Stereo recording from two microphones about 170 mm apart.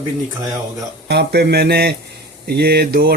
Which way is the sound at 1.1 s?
80° right.